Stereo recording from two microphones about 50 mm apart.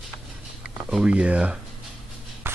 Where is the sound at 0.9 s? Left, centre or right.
Right.